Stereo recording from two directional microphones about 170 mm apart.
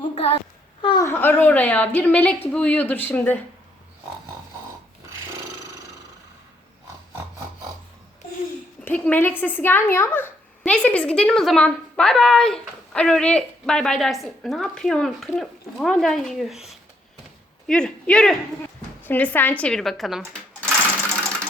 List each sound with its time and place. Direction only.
0.1 s child singing: 35° left (ahead or behind)
0.8 s a sound: 30° left (ahead or behind)
1.0 s a woman's voice: 15° left (ahead or behind)
8.8 s a woman's voice: 10° left (ahead or behind)